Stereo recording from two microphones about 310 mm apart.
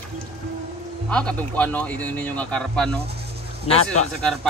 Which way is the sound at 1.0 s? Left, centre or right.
Centre.